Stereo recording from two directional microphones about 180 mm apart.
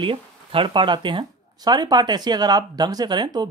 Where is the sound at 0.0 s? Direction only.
30° right (ahead or behind).